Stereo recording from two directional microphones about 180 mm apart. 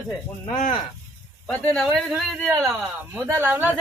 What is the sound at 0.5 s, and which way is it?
Speech, 45° left (ahead or behind).